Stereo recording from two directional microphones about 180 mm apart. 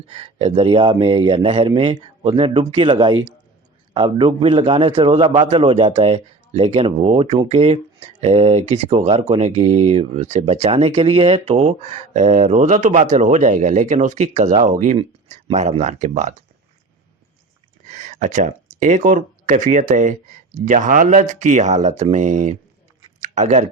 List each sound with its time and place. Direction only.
0.1 s speech: 30° right (ahead or behind)
17.8 s speech: 45° right (ahead or behind)
23.2 s a sound: 40° right (ahead or behind)